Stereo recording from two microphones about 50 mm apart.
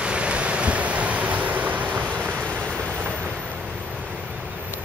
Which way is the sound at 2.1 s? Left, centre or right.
Right.